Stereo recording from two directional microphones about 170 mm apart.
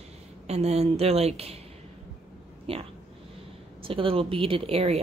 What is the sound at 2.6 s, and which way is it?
Speech, 35° right (ahead or behind).